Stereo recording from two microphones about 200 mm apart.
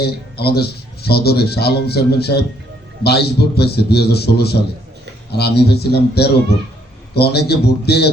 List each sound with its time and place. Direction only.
0.0 s speech: 50° left (ahead or behind)